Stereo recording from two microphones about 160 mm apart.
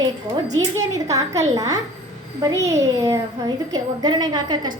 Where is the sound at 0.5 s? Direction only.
20° right (ahead or behind).